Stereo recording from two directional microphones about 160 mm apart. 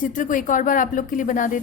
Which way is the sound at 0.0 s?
55° left (ahead or behind).